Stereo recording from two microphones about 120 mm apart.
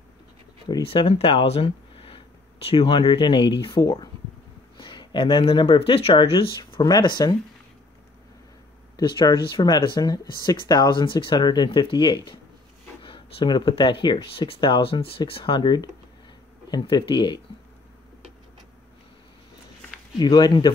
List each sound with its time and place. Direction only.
0.8 s speech: 55° left (ahead or behind)
6.6 s speech: 35° left (ahead or behind)
8.9 s speech: 35° left (ahead or behind)
20.2 s speech: 35° left (ahead or behind)